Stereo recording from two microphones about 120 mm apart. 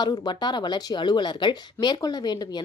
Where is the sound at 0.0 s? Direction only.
40° left (ahead or behind).